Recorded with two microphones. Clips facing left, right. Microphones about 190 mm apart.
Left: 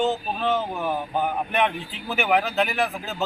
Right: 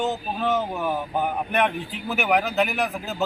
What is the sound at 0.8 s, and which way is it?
A man's voice, centre (ahead or behind).